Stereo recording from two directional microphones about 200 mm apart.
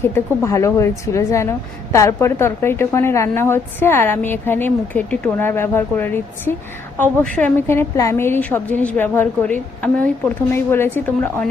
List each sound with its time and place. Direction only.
0.0 s a woman's voice: 15° left (ahead or behind)